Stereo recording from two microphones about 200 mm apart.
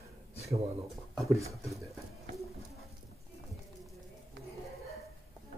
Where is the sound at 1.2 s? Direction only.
15° right (ahead or behind).